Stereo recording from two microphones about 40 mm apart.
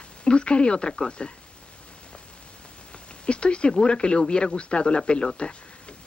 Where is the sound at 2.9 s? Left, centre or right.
Left.